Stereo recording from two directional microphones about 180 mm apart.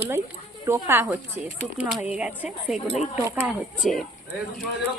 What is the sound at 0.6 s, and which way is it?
Speech, 15° right (ahead or behind).